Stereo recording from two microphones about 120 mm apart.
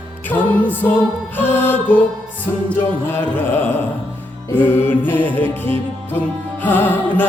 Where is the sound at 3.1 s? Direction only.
20° left (ahead or behind).